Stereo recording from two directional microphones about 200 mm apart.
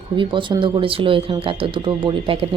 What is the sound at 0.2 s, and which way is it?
Speech, 25° right (ahead or behind).